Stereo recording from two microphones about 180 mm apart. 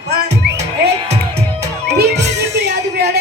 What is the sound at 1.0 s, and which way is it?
Music, 40° right (ahead or behind).